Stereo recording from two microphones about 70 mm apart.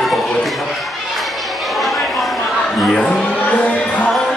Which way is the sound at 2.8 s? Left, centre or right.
Centre.